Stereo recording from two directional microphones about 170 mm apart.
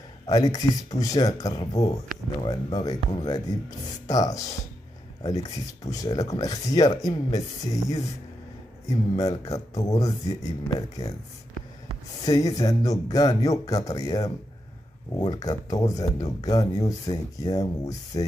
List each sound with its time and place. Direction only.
0.3 s speech: 20° left (ahead or behind)
12.3 s speech: 20° left (ahead or behind)